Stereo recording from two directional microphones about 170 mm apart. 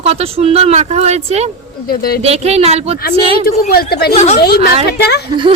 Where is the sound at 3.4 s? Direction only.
60° left (ahead or behind).